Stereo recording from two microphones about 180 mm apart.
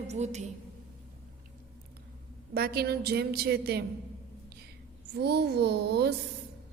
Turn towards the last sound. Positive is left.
turn(degrees=-65)  # may be behind; listen again after turning